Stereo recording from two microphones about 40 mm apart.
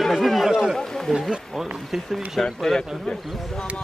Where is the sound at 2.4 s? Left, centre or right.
Centre.